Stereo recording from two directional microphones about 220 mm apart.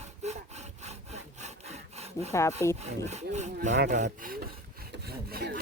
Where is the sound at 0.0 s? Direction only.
30° right (ahead or behind).